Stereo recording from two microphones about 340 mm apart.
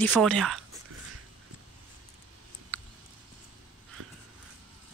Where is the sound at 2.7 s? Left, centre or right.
Centre.